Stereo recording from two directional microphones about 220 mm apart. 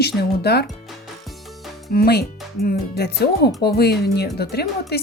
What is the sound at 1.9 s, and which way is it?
Speech, 45° left (ahead or behind).